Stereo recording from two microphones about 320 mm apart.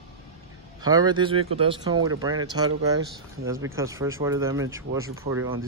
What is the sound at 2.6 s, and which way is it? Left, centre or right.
Speech, right.